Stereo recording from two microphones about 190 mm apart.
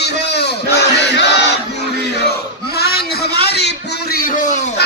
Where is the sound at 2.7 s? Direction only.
55° left (ahead or behind).